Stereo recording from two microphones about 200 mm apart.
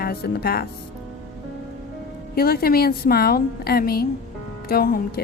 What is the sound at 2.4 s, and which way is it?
Speech, 50° left (ahead or behind).